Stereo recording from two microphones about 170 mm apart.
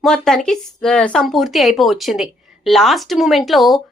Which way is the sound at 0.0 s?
Centre (ahead or behind).